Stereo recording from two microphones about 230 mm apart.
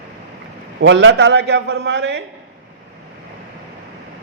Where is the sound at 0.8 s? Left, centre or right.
Right.